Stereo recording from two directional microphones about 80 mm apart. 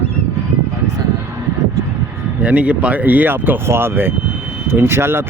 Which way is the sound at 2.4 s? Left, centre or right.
Centre.